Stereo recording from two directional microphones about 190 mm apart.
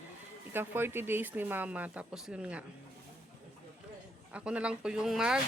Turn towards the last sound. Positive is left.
turn(degrees=-5)  # may be behind; listen again after turning